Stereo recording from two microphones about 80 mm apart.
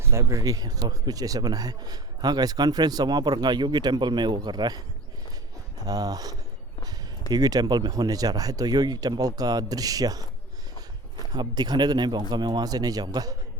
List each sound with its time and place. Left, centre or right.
0.0 s speech: right
5.8 s speech: right
11.3 s speech: right